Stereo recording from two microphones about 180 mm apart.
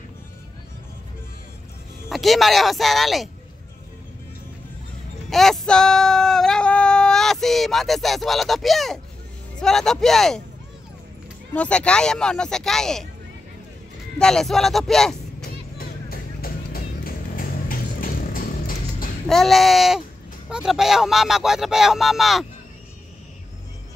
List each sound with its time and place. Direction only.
2.0 s speech: centre (ahead or behind)
5.3 s female singing: centre (ahead or behind)
9.6 s speech: 5° left (ahead or behind)
11.5 s speech: 5° left (ahead or behind)
14.1 s speech: 5° left (ahead or behind)
15.8 s music: 55° left (ahead or behind)
19.2 s speech: centre (ahead or behind)